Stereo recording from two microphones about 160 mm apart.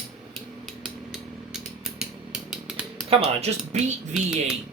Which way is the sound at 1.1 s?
5° right (ahead or behind).